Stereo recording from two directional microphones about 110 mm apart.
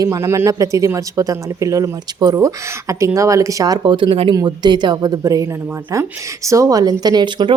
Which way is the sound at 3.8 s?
50° right (ahead or behind).